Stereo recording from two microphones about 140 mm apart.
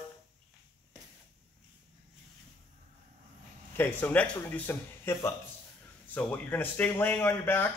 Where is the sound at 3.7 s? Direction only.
15° left (ahead or behind).